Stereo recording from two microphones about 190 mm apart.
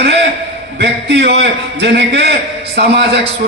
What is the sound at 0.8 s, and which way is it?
A man's voice, 60° right (ahead or behind).